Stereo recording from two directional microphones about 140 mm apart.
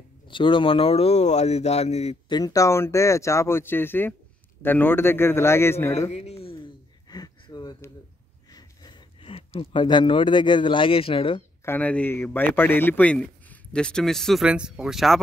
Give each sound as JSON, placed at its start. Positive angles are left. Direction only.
{"t": 0.3, "sound": "speech", "side_deg": 35}
{"t": 2.2, "sound": "speech", "side_deg": 30}
{"t": 5.9, "sound": "a sound", "side_deg": 50}
{"t": 9.3, "sound": "speech", "side_deg": 40}
{"t": 11.6, "sound": "speech", "side_deg": 15}